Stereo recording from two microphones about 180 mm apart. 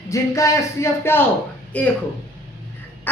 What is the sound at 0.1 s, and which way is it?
Speech, 15° left (ahead or behind).